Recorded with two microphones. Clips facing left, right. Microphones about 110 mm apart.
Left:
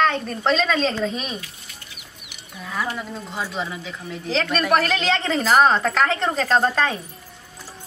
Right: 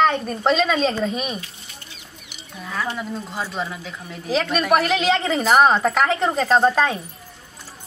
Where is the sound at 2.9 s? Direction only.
Centre (ahead or behind).